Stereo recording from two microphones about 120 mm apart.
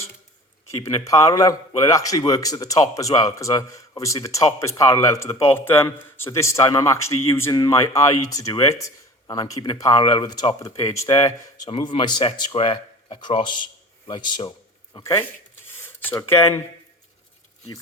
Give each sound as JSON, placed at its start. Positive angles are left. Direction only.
{"t": 0.8, "sound": "speech", "side_deg": 25}
{"t": 11.7, "sound": "speech", "side_deg": 45}
{"t": 14.9, "sound": "speech", "side_deg": 25}